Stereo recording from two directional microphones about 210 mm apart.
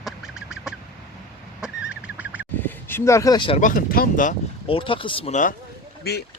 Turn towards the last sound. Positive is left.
turn(degrees=50)  # may be behind; listen again after turning